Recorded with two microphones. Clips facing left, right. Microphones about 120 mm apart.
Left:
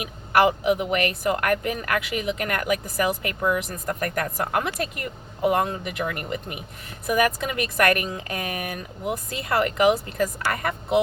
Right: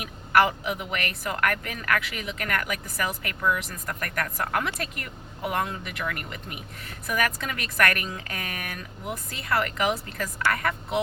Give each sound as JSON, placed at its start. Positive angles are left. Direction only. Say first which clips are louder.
{"t": 0.0, "sound": "speech", "louder": "left 2 dB", "side_deg": 20}